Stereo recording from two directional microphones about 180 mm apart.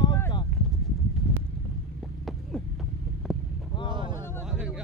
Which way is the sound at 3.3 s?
5° right (ahead or behind).